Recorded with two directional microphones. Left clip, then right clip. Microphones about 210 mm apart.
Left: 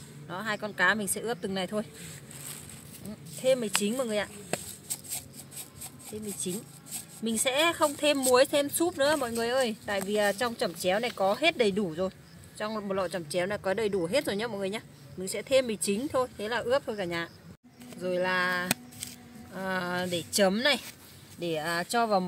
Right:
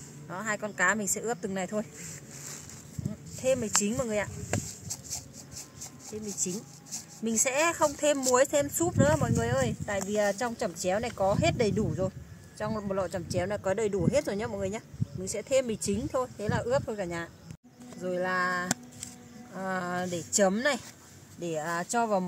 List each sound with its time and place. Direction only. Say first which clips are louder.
0.3 s speech: even; 15° left (ahead or behind)
3.4 s speech: left 1 dB; 15° left (ahead or behind)
7.2 s speech: left 1 dB; 10° left (ahead or behind)
18.0 s a sound: left 1 dB; 10° left (ahead or behind)
19.5 s speech: left 1 dB; 10° left (ahead or behind)